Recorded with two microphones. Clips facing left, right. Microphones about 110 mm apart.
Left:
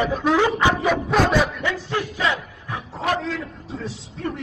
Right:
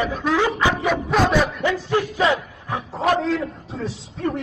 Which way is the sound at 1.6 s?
20° right (ahead or behind).